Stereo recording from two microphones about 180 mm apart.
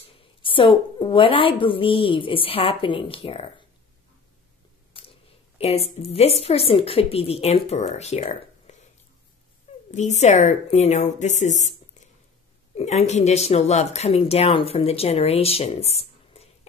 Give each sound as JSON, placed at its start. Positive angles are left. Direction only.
{"t": 0.4, "sound": "a woman's voice", "side_deg": 30}
{"t": 4.9, "sound": "a sound", "side_deg": 30}
{"t": 5.6, "sound": "a woman's voice", "side_deg": 35}
{"t": 9.8, "sound": "a woman's voice", "side_deg": 40}
{"t": 12.7, "sound": "a woman's voice", "side_deg": 40}